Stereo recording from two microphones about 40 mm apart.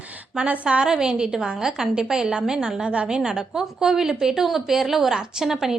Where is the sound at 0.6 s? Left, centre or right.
Right.